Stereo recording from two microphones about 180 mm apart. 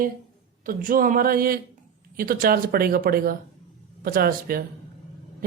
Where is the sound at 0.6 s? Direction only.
50° right (ahead or behind).